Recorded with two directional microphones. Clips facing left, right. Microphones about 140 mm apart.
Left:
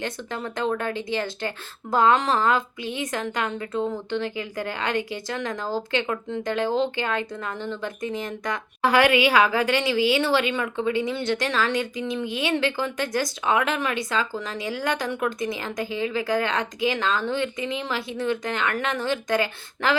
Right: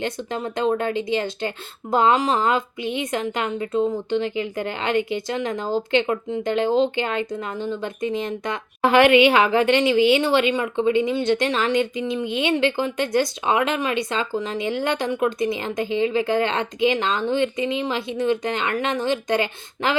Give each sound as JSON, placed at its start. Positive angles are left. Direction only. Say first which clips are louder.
{"t": 0.0, "sound": "a woman's voice", "louder": "right 4 dB", "side_deg": -20}